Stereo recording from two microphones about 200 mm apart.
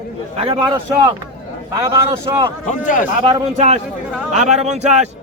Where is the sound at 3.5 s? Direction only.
35° right (ahead or behind).